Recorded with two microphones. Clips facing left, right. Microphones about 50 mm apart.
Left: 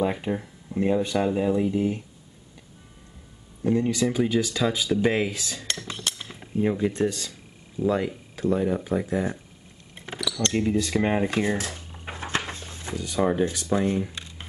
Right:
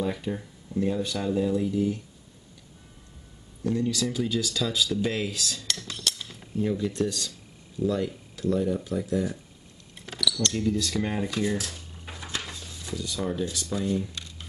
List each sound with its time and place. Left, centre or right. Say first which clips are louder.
0.0 s speech: left 4 dB; left
3.6 s speech: left 4 dB; left